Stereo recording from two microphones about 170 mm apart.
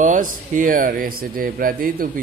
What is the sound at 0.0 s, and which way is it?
Speech, 50° right (ahead or behind).